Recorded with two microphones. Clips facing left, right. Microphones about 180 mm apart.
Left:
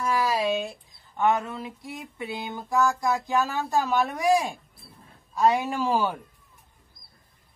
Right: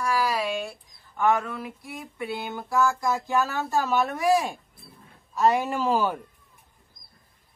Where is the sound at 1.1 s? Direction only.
20° left (ahead or behind).